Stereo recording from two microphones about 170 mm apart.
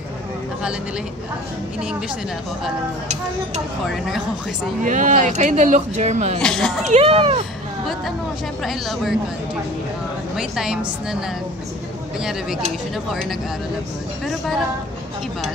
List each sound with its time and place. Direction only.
1.8 s speech: 5° right (ahead or behind)
3.8 s speech: centre (ahead or behind)
4.8 s speech: 50° right (ahead or behind)
6.4 s speech: 5° left (ahead or behind)
6.9 s speech: 35° right (ahead or behind)
8.6 s speech: centre (ahead or behind)
10.3 s speech: 5° right (ahead or behind)